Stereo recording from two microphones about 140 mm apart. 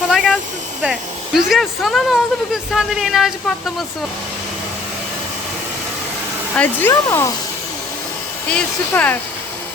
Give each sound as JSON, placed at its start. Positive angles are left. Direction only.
{"t": 0.1, "sound": "a sound", "side_deg": 0}
{"t": 0.8, "sound": "speech", "side_deg": -5}
{"t": 6.9, "sound": "speech", "side_deg": 20}
{"t": 8.4, "sound": "speech", "side_deg": 10}